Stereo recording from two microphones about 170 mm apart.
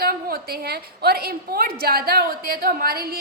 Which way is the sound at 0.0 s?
60° right (ahead or behind).